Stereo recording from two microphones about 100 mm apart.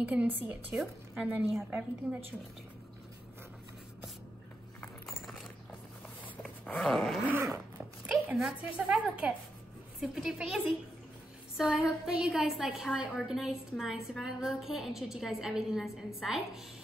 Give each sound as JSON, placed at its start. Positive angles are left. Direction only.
{"t": 0.0, "sound": "a woman's voice", "side_deg": -15}
{"t": 6.6, "sound": "dog", "side_deg": 15}
{"t": 6.9, "sound": "a woman's voice", "side_deg": 5}
{"t": 7.2, "sound": "zipper", "side_deg": -25}
{"t": 8.1, "sound": "a woman's voice", "side_deg": -10}